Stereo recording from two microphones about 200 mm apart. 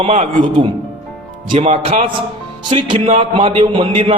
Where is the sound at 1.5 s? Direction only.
30° right (ahead or behind).